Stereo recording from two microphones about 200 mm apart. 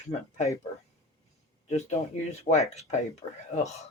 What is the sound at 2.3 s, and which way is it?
Speech, 35° left (ahead or behind).